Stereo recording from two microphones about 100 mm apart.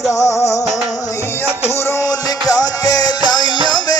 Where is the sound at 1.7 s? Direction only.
30° left (ahead or behind).